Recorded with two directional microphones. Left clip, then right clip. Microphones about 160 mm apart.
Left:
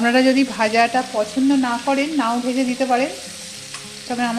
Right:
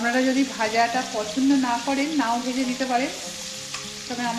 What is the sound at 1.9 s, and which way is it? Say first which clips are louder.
Speech: left 5 dB; 75° left (ahead or behind).